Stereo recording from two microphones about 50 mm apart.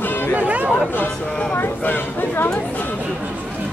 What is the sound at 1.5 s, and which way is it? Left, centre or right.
Speech, left.